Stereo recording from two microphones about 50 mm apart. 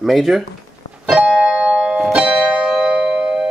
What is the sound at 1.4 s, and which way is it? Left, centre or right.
Music, centre.